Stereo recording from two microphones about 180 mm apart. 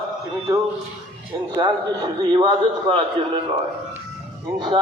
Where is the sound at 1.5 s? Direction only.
25° right (ahead or behind).